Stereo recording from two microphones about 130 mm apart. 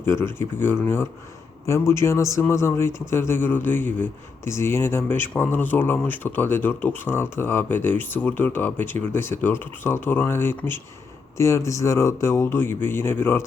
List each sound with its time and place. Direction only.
0.0 s a man's voice: 20° left (ahead or behind)